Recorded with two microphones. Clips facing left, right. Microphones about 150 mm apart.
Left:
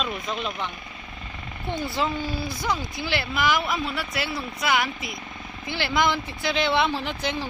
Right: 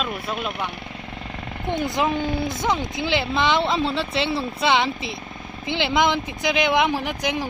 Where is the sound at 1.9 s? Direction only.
20° right (ahead or behind).